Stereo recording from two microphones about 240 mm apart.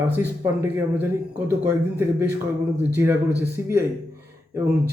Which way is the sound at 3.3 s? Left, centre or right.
Centre.